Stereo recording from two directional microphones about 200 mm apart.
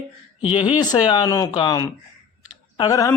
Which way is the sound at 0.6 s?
20° left (ahead or behind).